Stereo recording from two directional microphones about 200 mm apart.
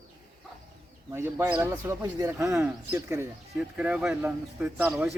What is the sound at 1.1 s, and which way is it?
Speech, 15° right (ahead or behind).